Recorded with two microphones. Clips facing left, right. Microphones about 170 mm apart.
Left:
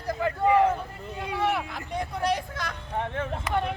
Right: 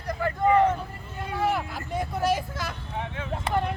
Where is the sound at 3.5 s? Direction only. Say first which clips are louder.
Right 2 dB; 30° right (ahead or behind).